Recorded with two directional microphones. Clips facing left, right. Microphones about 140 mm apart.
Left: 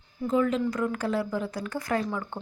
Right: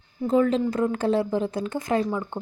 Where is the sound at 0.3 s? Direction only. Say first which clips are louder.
Right 4 dB; 35° right (ahead or behind).